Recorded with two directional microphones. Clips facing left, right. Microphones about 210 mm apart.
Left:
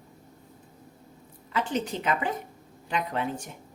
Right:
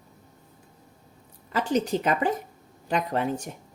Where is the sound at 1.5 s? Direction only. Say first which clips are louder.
Right 4 dB; 40° right (ahead or behind).